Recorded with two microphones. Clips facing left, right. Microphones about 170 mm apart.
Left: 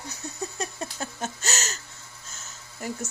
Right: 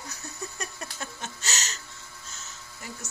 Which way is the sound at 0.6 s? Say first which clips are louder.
Left 5 dB; 30° left (ahead or behind).